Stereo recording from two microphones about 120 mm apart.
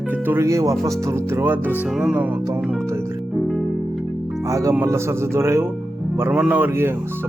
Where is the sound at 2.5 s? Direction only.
5° right (ahead or behind).